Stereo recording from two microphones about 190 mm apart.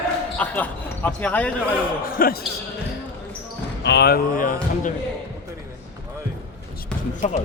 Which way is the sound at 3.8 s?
60° left (ahead or behind).